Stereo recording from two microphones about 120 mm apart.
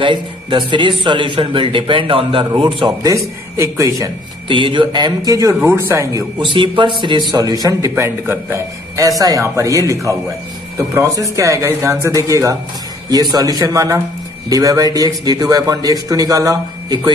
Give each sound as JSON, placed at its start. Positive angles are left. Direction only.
{"t": 0.0, "sound": "a man's voice", "side_deg": -45}
{"t": 3.1, "sound": "speech", "side_deg": -25}
{"t": 4.5, "sound": "a man's voice", "side_deg": -45}
{"t": 6.4, "sound": "a man's voice", "side_deg": -45}
{"t": 7.9, "sound": "a man's voice", "side_deg": -20}